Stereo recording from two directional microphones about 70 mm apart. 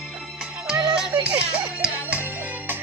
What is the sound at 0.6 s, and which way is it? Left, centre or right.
Music, centre.